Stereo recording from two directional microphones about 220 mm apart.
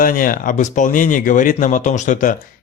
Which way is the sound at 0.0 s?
40° left (ahead or behind).